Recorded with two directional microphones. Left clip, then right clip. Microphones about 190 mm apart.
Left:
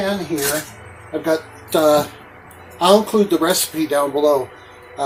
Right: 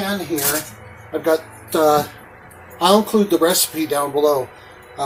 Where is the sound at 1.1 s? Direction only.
5° left (ahead or behind).